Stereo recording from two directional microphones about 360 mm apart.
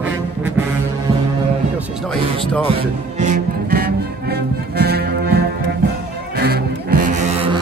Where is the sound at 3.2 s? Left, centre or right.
Right.